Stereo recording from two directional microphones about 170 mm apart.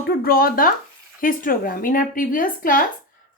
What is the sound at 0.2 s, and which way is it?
Speech, 60° left (ahead or behind).